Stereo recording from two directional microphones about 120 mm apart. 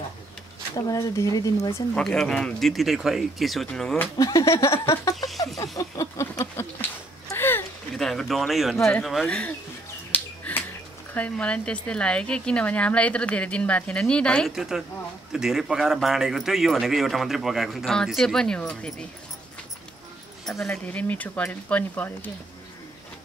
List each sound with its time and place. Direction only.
0.7 s speech: 30° left (ahead or behind)
2.0 s speech: 5° left (ahead or behind)
4.2 s speech: 30° left (ahead or behind)
5.6 s a sound: 25° left (ahead or behind)
7.9 s a sound: 5° left (ahead or behind)
8.8 s a woman's voice: centre (ahead or behind)
10.1 s finger snapping: 15° left (ahead or behind)
11.1 s a woman's voice: 10° left (ahead or behind)
14.5 s speech: 5° right (ahead or behind)
20.4 s a woman's voice: 5° left (ahead or behind)